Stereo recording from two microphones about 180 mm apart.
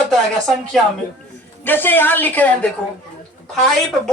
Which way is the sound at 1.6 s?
10° left (ahead or behind).